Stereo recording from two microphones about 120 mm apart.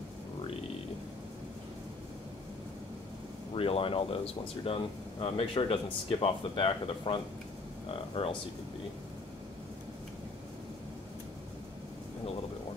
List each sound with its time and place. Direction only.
3.5 s speech: 50° left (ahead or behind)